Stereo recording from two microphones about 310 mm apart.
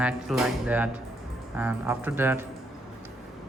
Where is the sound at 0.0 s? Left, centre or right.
Centre.